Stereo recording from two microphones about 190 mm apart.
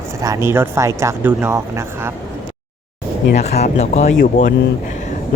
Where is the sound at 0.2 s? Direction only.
15° right (ahead or behind).